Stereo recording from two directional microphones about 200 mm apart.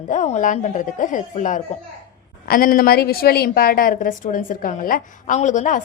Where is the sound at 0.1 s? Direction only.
40° left (ahead or behind).